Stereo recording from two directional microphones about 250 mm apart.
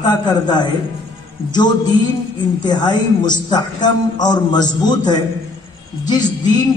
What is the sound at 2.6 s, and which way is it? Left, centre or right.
A man's voice, centre.